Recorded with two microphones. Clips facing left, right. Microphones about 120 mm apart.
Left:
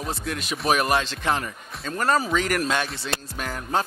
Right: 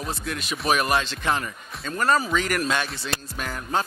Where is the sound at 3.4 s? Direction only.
40° left (ahead or behind).